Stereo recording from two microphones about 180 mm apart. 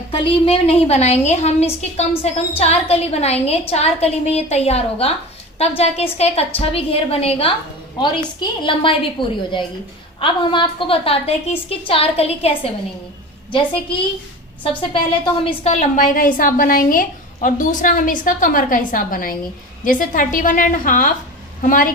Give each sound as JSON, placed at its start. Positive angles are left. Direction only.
{"t": 0.1, "sound": "a woman's voice", "side_deg": 35}
{"t": 14.6, "sound": "a woman's voice", "side_deg": 30}